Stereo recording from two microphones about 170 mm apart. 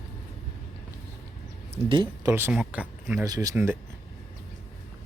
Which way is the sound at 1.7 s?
30° right (ahead or behind).